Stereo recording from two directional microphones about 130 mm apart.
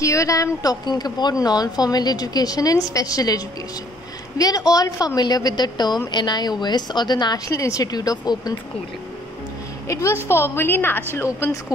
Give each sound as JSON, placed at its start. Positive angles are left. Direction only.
{"t": 0.0, "sound": "a woman's voice", "side_deg": 25}
{"t": 10.2, "sound": "a woman's voice", "side_deg": 20}